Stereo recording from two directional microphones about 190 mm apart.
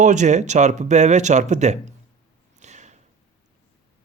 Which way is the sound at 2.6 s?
40° right (ahead or behind).